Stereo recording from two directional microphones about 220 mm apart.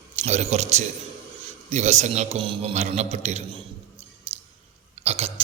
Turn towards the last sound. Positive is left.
turn(degrees=-25)  # may be behind; listen again after turning